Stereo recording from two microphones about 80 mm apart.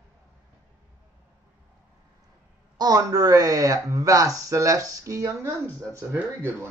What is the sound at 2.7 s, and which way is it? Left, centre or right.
Speech, right.